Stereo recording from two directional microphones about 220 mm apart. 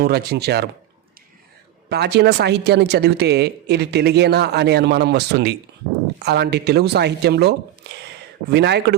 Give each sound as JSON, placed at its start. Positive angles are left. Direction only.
{"t": 0.0, "sound": "speech", "side_deg": -45}
{"t": 1.9, "sound": "speech", "side_deg": -50}